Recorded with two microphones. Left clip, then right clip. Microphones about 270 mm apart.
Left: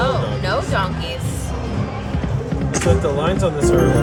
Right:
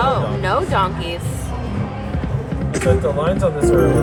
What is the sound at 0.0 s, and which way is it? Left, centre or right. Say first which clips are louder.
Music: right 2 dB; right.